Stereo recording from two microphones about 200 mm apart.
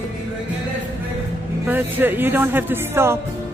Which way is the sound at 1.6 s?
10° right (ahead or behind).